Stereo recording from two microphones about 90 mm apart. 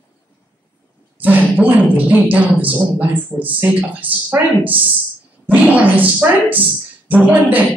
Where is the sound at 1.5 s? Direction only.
15° right (ahead or behind).